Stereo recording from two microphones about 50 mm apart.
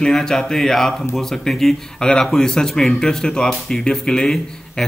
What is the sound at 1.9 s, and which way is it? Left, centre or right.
Speech, centre.